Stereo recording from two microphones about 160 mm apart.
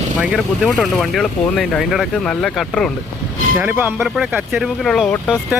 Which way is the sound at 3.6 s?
10° right (ahead or behind).